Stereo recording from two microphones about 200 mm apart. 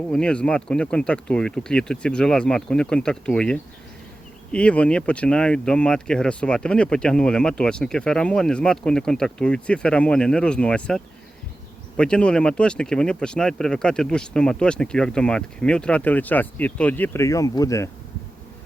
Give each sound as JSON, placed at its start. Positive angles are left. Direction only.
{"t": 0.1, "sound": "speech", "side_deg": 5}